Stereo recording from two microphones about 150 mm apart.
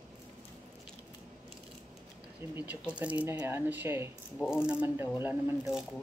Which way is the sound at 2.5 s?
10° right (ahead or behind).